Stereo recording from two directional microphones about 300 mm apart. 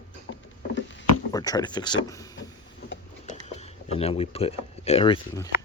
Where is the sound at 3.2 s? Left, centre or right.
Left.